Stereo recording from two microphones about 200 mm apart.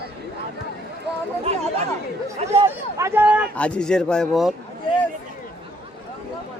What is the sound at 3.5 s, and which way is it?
Speech, 5° left (ahead or behind).